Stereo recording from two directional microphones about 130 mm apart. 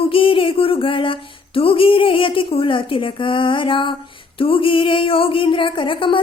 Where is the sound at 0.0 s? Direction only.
45° left (ahead or behind).